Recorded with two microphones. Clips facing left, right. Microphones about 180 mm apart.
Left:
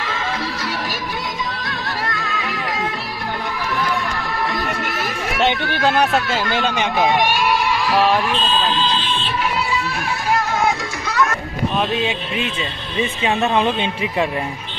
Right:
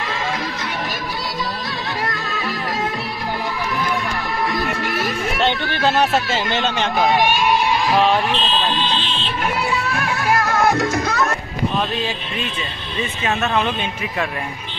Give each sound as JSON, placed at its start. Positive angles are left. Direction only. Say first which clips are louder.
{"t": 6.5, "sound": "speech", "louder": "even", "side_deg": 10}
{"t": 7.1, "sound": "speech", "louder": "right 3 dB", "side_deg": -10}
{"t": 7.9, "sound": "speech", "louder": "even", "side_deg": 5}
{"t": 9.9, "sound": "music", "louder": "right 1 dB", "side_deg": -75}
{"t": 10.8, "sound": "music", "louder": "right 2 dB", "side_deg": -45}
{"t": 13.6, "sound": "a man's voice", "louder": "left 3 dB", "side_deg": 30}